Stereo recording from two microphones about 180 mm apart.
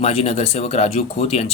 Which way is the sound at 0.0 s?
35° left (ahead or behind).